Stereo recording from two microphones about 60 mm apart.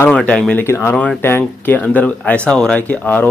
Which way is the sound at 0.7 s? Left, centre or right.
Left.